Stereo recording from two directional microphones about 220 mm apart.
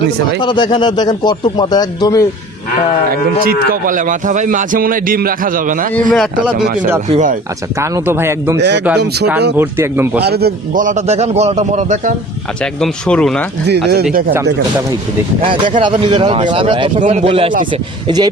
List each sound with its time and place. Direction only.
0.4 s speech: 20° left (ahead or behind)
3.4 s a man's voice: 40° right (ahead or behind)
5.9 s speech: centre (ahead or behind)
6.5 s a man's voice: 40° right (ahead or behind)
7.8 s speech: 10° right (ahead or behind)
8.5 s speech: 50° right (ahead or behind)
9.6 s speech: 10° right (ahead or behind)
10.2 s a man's voice: 45° right (ahead or behind)
12.8 s speech: 5° left (ahead or behind)
13.7 s a man's voice: 50° right (ahead or behind)
15.4 s speech: 20° right (ahead or behind)